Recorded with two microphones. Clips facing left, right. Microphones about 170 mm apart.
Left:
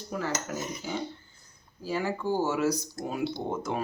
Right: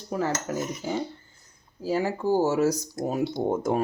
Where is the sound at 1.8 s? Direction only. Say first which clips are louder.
Right 5 dB; 35° right (ahead or behind).